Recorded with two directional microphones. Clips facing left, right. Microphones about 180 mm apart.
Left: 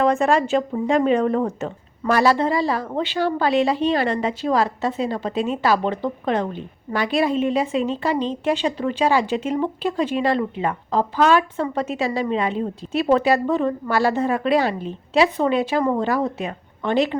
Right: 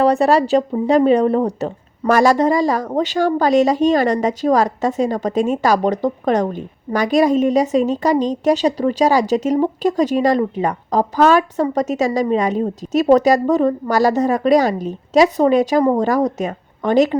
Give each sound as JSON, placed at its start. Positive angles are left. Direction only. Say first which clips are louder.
{"t": 0.0, "sound": "a woman's voice", "louder": "right 4 dB", "side_deg": -35}